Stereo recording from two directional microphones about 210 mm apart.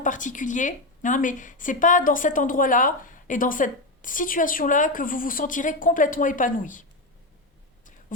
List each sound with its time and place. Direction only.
0.0 s a woman's voice: 35° left (ahead or behind)